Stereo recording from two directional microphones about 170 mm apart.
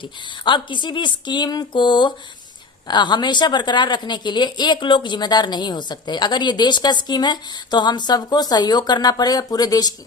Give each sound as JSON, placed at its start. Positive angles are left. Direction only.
{"t": 0.0, "sound": "a woman's voice", "side_deg": 30}